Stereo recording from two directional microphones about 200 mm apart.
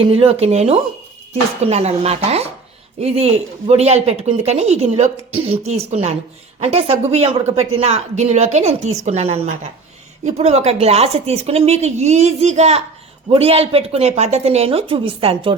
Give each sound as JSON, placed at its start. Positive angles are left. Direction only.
{"t": 0.0, "sound": "a woman's voice", "side_deg": -25}